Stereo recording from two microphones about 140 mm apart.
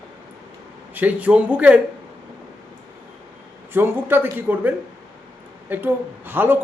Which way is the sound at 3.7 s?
15° right (ahead or behind).